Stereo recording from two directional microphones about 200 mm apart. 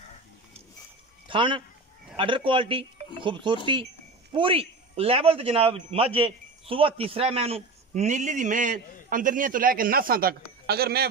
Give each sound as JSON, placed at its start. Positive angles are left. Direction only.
{"t": 1.3, "sound": "a man's voice", "side_deg": -25}